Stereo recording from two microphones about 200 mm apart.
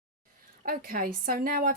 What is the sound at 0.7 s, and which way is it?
A woman's voice, 45° right (ahead or behind).